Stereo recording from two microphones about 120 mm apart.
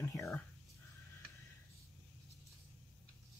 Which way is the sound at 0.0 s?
25° left (ahead or behind).